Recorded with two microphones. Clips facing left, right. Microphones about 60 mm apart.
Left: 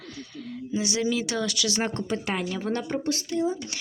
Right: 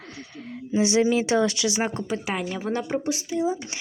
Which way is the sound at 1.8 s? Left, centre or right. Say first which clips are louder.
Right 1 dB; centre.